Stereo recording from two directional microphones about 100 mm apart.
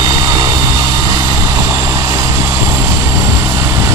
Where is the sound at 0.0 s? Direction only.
40° right (ahead or behind).